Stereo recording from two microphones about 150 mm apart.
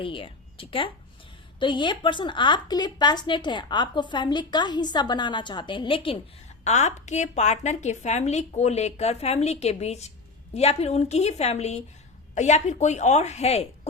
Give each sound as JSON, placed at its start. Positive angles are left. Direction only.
{"t": 0.0, "sound": "a woman's voice", "side_deg": 35}
{"t": 6.7, "sound": "a woman's voice", "side_deg": 50}